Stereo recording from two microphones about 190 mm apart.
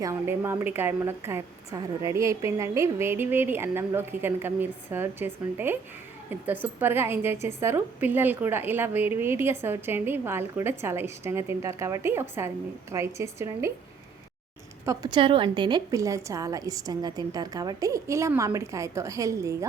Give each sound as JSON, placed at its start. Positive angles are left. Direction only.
{"t": 0.0, "sound": "a woman's voice", "side_deg": -15}
{"t": 14.8, "sound": "a woman's voice", "side_deg": -20}